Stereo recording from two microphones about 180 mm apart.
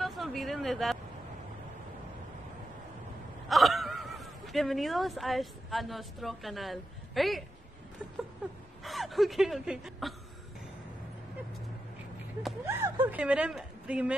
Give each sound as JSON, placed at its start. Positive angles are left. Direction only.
{"t": 0.0, "sound": "a sound", "side_deg": 0}
{"t": 3.4, "sound": "speech", "side_deg": 0}
{"t": 8.8, "sound": "speech", "side_deg": 0}
{"t": 12.6, "sound": "speech", "side_deg": -10}